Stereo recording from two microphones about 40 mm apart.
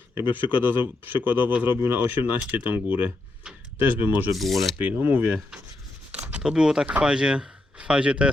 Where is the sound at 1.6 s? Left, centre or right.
Right.